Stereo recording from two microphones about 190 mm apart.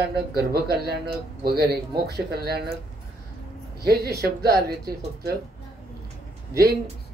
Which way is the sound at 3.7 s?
55° right (ahead or behind).